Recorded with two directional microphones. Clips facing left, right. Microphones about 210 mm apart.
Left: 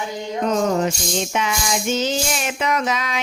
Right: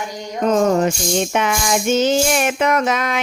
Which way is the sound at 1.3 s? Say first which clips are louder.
Right 4 dB; 55° right (ahead or behind).